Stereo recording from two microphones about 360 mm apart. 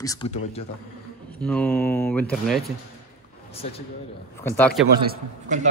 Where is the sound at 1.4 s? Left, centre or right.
Centre.